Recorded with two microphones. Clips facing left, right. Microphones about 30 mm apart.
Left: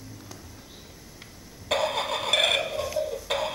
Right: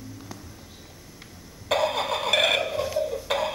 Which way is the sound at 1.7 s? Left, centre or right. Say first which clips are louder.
Right 2 dB; centre.